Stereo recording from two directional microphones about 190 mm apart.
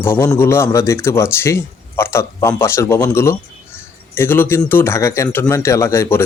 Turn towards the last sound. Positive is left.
turn(degrees=15)  # may be behind; listen again after turning